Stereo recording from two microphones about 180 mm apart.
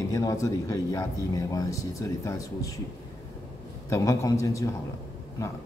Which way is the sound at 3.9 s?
15° left (ahead or behind).